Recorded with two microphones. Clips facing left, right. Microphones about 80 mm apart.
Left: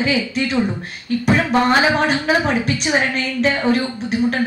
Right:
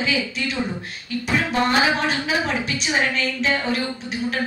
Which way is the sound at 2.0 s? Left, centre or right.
Left.